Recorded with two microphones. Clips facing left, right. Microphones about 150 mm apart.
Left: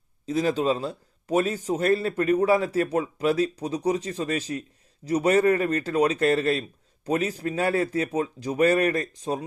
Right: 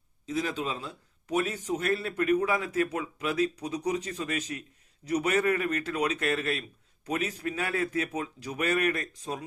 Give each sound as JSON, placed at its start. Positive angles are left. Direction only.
{"t": 0.3, "sound": "a man's voice", "side_deg": 35}